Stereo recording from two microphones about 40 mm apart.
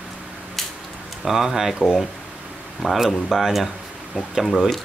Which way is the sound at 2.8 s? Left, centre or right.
Centre.